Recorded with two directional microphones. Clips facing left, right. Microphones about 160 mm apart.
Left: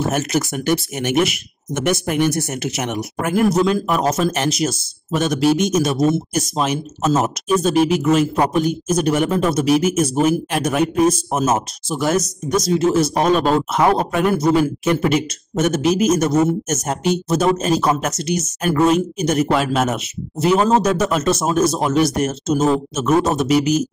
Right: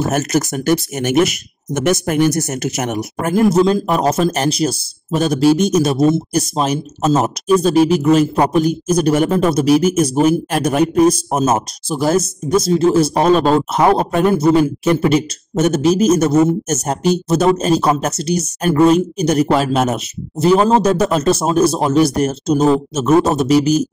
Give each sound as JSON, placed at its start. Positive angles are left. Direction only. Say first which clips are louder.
{"t": 0.0, "sound": "a man's voice", "louder": "right 3 dB", "side_deg": -45}